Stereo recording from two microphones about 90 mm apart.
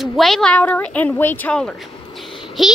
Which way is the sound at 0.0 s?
Centre (ahead or behind).